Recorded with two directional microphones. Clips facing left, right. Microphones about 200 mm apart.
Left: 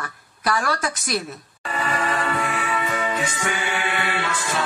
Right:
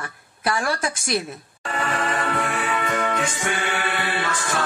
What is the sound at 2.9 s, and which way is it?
Music, 55° right (ahead or behind).